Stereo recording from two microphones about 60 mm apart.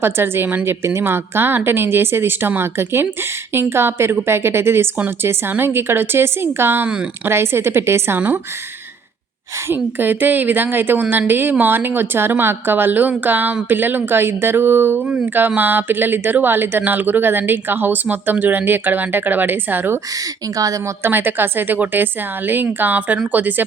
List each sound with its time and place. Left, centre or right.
0.0 s a woman's voice: right
6.8 s speech: centre
7.3 s a woman's voice: right
9.6 s speech: right
20.1 s speech: right
21.0 s speech: right